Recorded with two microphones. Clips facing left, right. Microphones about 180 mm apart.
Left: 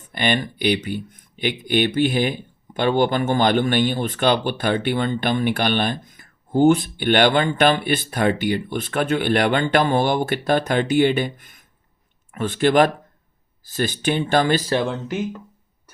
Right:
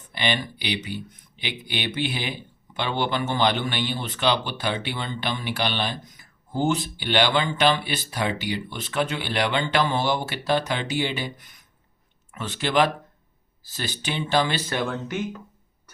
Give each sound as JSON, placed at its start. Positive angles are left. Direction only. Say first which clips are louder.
{"t": 0.1, "sound": "speech", "louder": "left 5 dB", "side_deg": 50}